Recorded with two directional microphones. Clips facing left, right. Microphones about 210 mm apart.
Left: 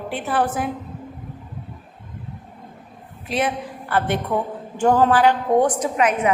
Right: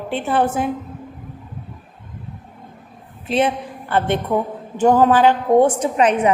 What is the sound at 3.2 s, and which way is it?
Speech, 25° right (ahead or behind).